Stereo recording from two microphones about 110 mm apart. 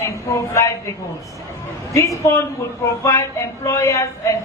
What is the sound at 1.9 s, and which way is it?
A woman's voice, 30° left (ahead or behind).